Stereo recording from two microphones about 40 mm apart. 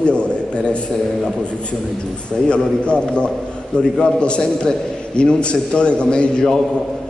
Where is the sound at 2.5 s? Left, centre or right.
Left.